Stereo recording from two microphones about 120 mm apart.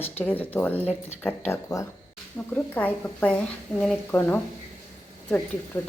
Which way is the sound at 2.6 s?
10° left (ahead or behind).